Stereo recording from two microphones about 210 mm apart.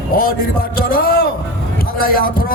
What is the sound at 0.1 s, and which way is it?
A man's voice, 45° left (ahead or behind).